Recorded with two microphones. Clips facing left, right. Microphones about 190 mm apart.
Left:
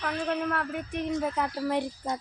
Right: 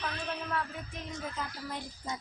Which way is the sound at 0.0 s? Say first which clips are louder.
Left 8 dB; 60° left (ahead or behind).